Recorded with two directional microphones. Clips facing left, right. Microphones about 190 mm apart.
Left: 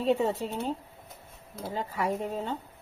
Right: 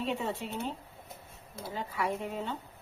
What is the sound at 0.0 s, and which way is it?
Speech, 35° left (ahead or behind).